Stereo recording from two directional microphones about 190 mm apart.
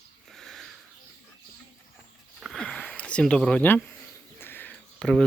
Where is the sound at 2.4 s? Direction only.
Centre (ahead or behind).